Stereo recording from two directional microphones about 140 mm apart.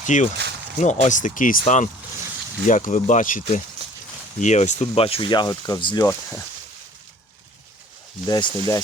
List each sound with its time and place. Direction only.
0.0 s speech: 65° left (ahead or behind)
1.6 s speech: 60° left (ahead or behind)
4.4 s speech: 55° left (ahead or behind); by 6.1 s 30° left (ahead or behind)
8.3 s speech: 25° left (ahead or behind)